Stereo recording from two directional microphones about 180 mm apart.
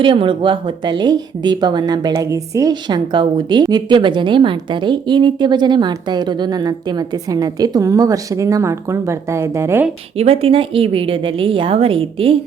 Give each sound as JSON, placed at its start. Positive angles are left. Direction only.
{"t": 0.0, "sound": "a woman's voice", "side_deg": -25}
{"t": 10.2, "sound": "a woman's voice", "side_deg": -30}